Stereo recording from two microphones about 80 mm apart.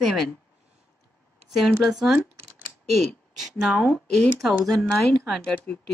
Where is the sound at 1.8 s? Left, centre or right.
Centre.